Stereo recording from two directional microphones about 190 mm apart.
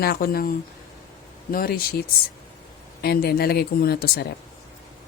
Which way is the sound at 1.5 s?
50° left (ahead or behind).